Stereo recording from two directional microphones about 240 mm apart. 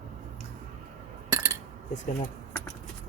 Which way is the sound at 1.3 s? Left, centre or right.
Centre.